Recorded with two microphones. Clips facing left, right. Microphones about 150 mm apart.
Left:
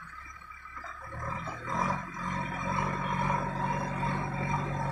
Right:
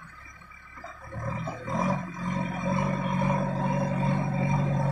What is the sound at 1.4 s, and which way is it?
Roar, 25° right (ahead or behind).